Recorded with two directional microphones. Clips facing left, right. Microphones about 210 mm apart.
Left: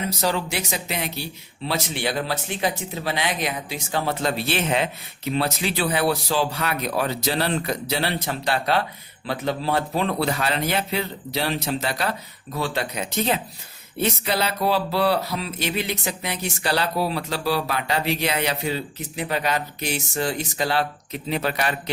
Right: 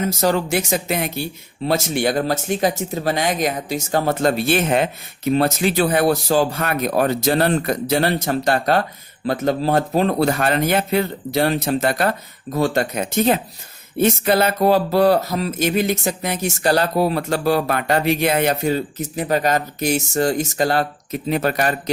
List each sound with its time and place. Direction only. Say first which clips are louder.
0.1 s speech: right 6 dB; 45° right (ahead or behind)